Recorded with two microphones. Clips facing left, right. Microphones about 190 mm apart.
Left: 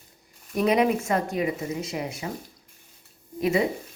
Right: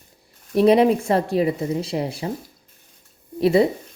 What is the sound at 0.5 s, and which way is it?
A woman's voice, 30° right (ahead or behind).